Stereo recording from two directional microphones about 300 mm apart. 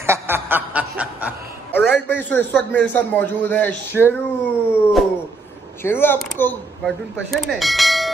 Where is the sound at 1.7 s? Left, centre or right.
Centre.